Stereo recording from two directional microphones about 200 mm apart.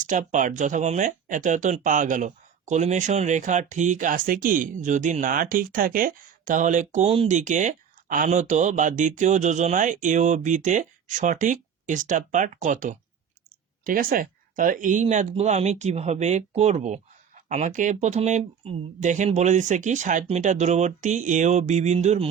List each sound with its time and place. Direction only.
0.1 s speech: 40° right (ahead or behind)